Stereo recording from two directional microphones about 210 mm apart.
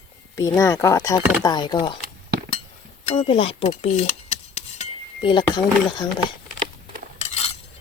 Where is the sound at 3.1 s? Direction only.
25° left (ahead or behind).